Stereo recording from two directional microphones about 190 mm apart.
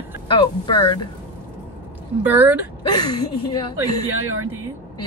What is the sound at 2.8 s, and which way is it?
Speech, 20° left (ahead or behind).